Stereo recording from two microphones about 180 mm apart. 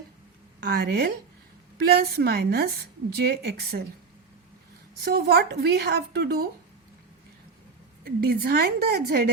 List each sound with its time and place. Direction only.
0.6 s speech: 65° right (ahead or behind)
5.0 s speech: 65° right (ahead or behind)
8.0 s speech: 60° right (ahead or behind)